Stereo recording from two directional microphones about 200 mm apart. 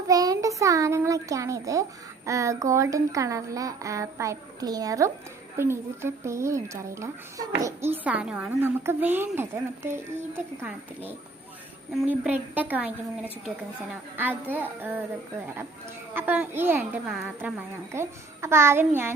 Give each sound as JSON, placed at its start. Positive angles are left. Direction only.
{"t": 0.1, "sound": "speech", "side_deg": -20}
{"t": 16.1, "sound": "speech", "side_deg": -10}